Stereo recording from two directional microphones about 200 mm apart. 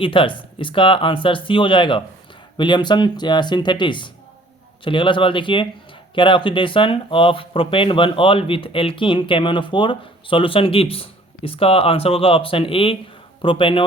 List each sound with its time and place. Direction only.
0.0 s speech: 25° left (ahead or behind)